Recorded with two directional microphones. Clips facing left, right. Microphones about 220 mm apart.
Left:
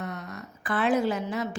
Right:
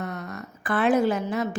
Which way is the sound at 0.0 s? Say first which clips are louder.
Right 3 dB; 50° right (ahead or behind).